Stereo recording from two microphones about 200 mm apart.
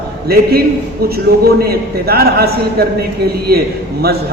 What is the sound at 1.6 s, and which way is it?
A man's voice, 50° right (ahead or behind).